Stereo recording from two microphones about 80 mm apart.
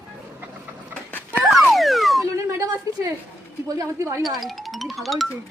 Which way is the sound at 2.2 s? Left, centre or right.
Right.